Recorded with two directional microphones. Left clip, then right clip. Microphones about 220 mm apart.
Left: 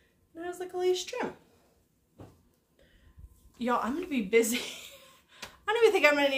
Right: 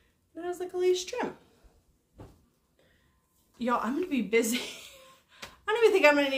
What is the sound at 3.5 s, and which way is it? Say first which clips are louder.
Speech: right 1 dB; centre (ahead or behind).